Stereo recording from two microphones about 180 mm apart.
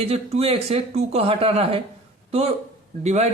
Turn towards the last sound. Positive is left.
turn(degrees=-40)  # may be behind; listen again after turning